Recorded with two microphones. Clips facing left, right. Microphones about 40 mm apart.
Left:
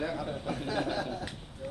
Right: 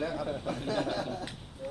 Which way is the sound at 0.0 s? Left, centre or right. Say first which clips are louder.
Right 1 dB; centre.